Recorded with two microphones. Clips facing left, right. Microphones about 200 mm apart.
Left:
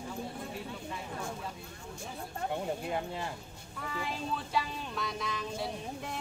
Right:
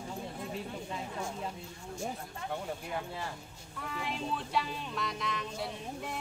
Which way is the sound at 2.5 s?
25° left (ahead or behind).